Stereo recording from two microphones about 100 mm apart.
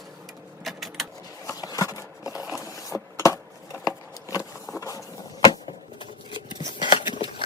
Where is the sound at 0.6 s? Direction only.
Centre (ahead or behind).